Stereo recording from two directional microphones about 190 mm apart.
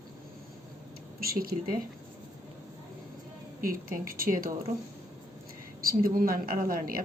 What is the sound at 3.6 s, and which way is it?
Speech, 50° right (ahead or behind).